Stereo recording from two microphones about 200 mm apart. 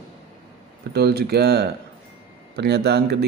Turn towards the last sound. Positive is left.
turn(degrees=-55)  # may be behind; listen again after turning